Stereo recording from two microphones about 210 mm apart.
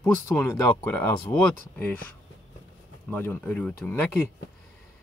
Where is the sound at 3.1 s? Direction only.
10° left (ahead or behind).